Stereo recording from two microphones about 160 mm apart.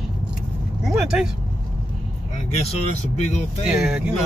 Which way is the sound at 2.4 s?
45° left (ahead or behind).